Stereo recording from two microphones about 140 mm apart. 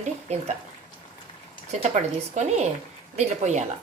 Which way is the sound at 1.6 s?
50° right (ahead or behind).